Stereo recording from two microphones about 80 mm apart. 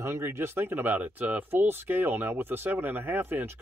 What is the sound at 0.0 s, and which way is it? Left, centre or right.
Speech, right.